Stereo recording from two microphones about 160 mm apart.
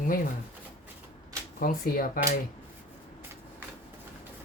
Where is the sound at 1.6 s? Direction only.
60° left (ahead or behind).